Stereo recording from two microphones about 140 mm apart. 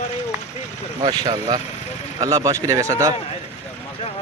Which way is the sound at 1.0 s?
30° right (ahead or behind).